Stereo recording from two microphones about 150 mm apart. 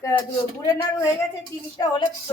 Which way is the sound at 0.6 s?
25° left (ahead or behind).